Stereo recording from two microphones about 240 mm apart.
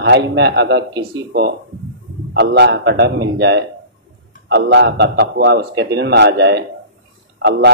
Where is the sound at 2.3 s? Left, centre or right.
Right.